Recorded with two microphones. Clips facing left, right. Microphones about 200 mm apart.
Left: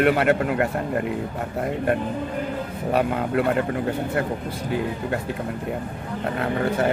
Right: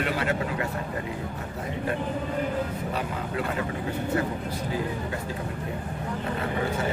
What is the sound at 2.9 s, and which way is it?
Speech, 65° left (ahead or behind).